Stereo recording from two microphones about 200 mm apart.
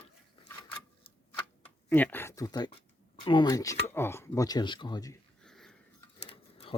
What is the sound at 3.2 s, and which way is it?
Speech, 25° left (ahead or behind).